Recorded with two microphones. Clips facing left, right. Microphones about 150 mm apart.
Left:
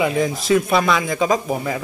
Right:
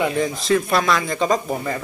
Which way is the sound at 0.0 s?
5° left (ahead or behind).